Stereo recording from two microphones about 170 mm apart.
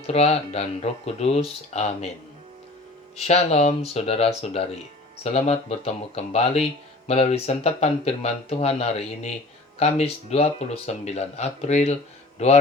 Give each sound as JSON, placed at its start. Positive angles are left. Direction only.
{"t": 0.1, "sound": "speech", "side_deg": 40}
{"t": 3.2, "sound": "speech", "side_deg": 40}